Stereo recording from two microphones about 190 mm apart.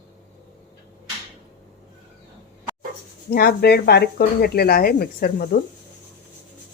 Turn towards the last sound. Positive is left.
turn(degrees=50)  # may be behind; listen again after turning